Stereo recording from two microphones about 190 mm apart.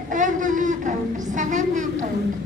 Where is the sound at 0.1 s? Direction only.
45° right (ahead or behind).